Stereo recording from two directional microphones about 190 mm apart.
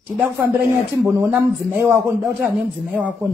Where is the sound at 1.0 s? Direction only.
10° right (ahead or behind).